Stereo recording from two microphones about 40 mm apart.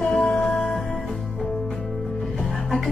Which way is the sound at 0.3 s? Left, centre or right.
Centre.